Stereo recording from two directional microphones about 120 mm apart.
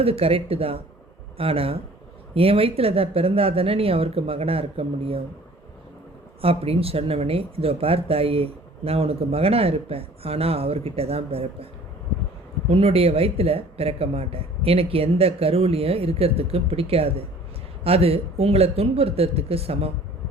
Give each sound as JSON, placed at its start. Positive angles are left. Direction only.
{"t": 0.0, "sound": "speech", "side_deg": -55}
{"t": 6.4, "sound": "speech", "side_deg": -55}